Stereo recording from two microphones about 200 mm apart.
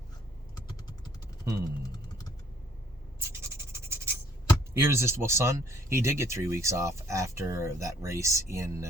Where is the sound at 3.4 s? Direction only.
15° right (ahead or behind).